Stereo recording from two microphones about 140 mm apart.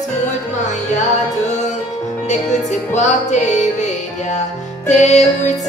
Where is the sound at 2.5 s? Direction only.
55° left (ahead or behind).